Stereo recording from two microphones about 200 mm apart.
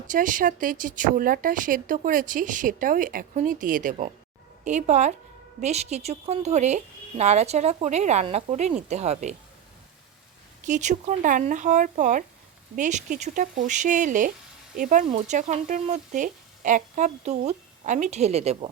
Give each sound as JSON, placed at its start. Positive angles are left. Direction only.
{"t": 0.1, "sound": "a woman's voice", "side_deg": -40}
{"t": 10.7, "sound": "a woman's voice", "side_deg": -35}